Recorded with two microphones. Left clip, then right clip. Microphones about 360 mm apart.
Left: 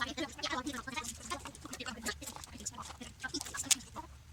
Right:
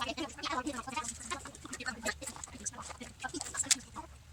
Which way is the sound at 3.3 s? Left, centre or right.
Centre.